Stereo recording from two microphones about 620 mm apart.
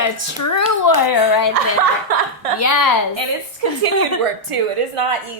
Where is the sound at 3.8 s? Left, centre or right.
Right.